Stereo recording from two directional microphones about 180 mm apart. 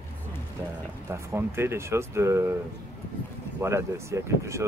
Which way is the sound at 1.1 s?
15° right (ahead or behind).